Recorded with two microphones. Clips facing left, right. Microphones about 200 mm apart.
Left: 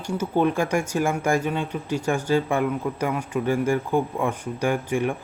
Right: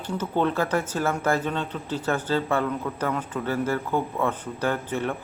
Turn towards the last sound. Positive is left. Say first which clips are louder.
# left 3 dB
turn(degrees=10)  # may be behind; listen again after turning